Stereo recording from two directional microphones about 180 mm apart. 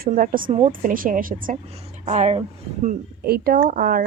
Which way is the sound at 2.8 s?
55° right (ahead or behind).